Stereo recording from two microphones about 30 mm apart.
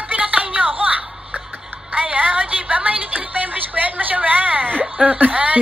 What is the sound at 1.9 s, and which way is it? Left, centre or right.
Music, right.